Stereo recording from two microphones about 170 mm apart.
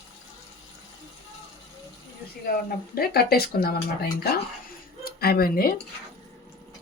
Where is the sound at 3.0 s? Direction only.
65° left (ahead or behind).